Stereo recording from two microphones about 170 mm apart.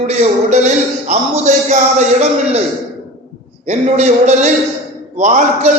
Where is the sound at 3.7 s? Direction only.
40° right (ahead or behind).